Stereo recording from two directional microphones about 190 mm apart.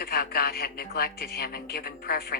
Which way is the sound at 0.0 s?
55° left (ahead or behind).